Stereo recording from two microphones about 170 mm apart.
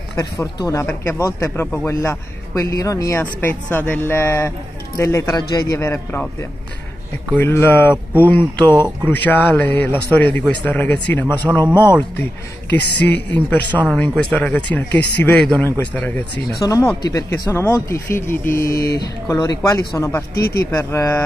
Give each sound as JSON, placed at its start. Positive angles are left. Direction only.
{"t": 0.2, "sound": "a man's voice", "side_deg": 20}
{"t": 7.3, "sound": "speech", "side_deg": 10}
{"t": 8.6, "sound": "speech", "side_deg": -25}
{"t": 9.1, "sound": "speech", "side_deg": 10}
{"t": 13.0, "sound": "a man's voice", "side_deg": 10}